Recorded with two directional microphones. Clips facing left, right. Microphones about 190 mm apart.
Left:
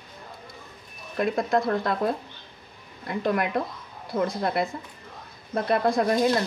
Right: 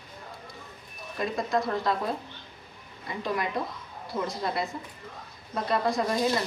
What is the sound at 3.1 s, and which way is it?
Speech, 60° left (ahead or behind).